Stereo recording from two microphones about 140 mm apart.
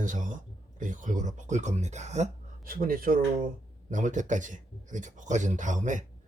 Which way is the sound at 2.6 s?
90° right.